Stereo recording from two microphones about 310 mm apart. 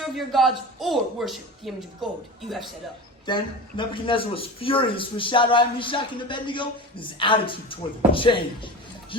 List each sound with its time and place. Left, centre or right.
0.0 s a woman's voice: centre
3.2 s a man's voice: centre